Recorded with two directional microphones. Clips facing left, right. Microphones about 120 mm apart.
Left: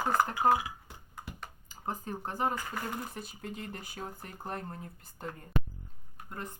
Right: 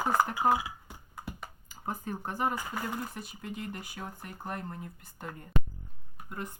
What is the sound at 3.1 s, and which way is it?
Speech, 30° left (ahead or behind).